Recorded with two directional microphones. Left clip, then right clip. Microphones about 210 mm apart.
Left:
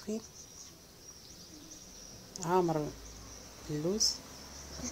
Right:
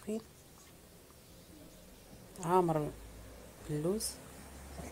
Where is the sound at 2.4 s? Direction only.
Centre (ahead or behind).